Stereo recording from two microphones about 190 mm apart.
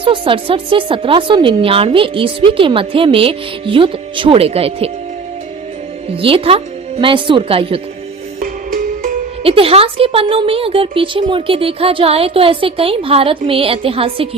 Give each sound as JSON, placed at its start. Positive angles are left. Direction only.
{"t": 0.0, "sound": "speech", "side_deg": -30}
{"t": 6.2, "sound": "speech", "side_deg": -30}
{"t": 9.4, "sound": "speech", "side_deg": -30}